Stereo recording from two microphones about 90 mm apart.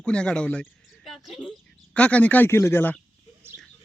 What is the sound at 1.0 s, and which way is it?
Speech, 5° right (ahead or behind).